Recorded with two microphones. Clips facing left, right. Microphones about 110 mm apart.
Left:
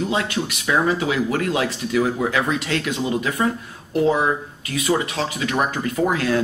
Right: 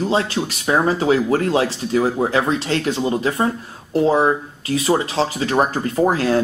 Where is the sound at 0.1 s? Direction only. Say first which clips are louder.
Right 3 dB; 30° right (ahead or behind).